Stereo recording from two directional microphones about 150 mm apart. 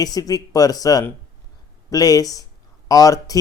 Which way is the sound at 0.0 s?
25° left (ahead or behind).